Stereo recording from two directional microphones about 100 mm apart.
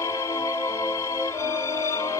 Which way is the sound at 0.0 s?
30° left (ahead or behind).